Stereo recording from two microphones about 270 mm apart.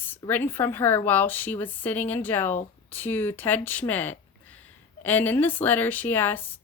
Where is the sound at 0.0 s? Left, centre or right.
Centre.